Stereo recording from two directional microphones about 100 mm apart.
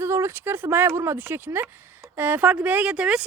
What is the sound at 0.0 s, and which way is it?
A woman's voice, 25° right (ahead or behind).